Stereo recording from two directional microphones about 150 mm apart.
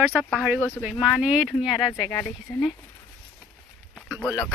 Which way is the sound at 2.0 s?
30° left (ahead or behind).